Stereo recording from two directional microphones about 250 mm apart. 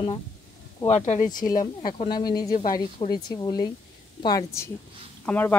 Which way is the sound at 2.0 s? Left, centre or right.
Centre.